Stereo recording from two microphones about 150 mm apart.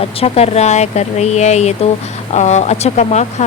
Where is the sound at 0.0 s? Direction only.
40° left (ahead or behind).